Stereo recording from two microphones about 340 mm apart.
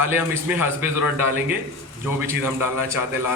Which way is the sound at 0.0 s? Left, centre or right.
Centre.